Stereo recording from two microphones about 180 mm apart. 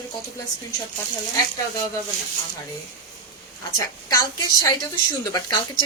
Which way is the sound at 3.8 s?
20° left (ahead or behind).